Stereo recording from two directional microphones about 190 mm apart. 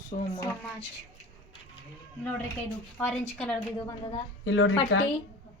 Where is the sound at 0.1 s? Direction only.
35° left (ahead or behind).